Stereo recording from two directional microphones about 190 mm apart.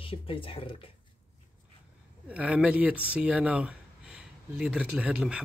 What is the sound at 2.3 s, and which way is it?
Speech, 5° right (ahead or behind).